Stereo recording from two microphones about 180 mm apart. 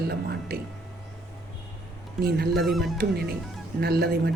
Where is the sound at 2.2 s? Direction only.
60° right (ahead or behind).